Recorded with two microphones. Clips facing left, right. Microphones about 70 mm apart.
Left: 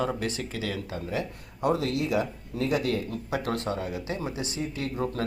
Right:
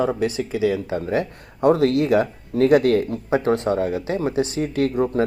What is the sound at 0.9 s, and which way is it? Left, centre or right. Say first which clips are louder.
Speech: right 9 dB; right.